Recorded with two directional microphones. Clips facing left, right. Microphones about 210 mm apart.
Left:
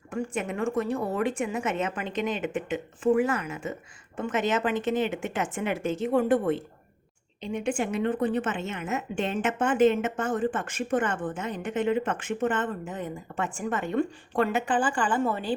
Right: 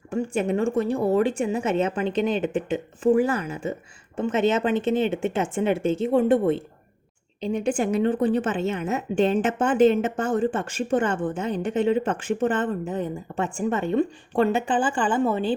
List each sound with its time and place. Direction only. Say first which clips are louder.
0.1 s a woman's voice: right 6 dB; 30° right (ahead or behind)